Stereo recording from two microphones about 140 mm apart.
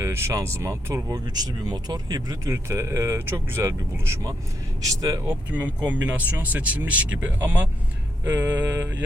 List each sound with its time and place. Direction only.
0.0 s speech: 20° right (ahead or behind)
5.2 s speech: 10° right (ahead or behind)